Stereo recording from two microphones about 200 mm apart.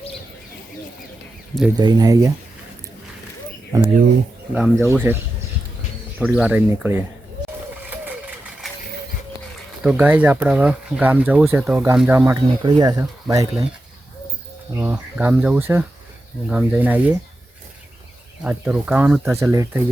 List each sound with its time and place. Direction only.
1.7 s speech: 20° right (ahead or behind)
3.7 s speech: 15° right (ahead or behind)
6.2 s speech: 5° right (ahead or behind)
9.8 s speech: 10° right (ahead or behind)
12.6 s speech: 20° right (ahead or behind)
14.8 s speech: 10° right (ahead or behind)
18.4 s speech: 5° right (ahead or behind)